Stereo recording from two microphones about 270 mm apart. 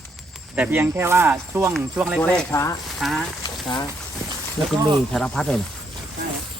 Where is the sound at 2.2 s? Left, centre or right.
Centre.